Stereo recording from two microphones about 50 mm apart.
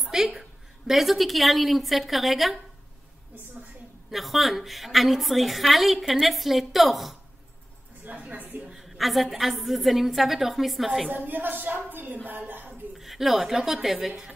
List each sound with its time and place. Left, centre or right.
0.0 s a woman's voice: centre
4.1 s a woman's voice: centre
8.0 s music: right
8.7 s a woman's voice: centre
11.1 s speech: right
12.9 s speech: centre